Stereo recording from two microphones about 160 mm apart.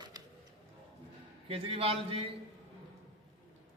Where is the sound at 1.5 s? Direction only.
35° right (ahead or behind).